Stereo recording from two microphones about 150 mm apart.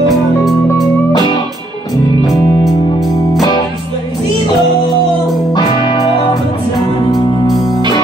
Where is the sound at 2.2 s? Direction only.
Centre (ahead or behind).